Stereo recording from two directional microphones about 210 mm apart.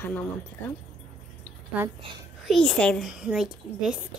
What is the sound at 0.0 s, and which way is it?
Speech, 10° left (ahead or behind).